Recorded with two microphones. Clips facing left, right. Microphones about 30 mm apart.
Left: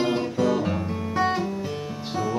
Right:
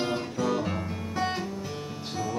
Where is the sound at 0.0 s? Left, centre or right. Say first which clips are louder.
Left 6 dB; left.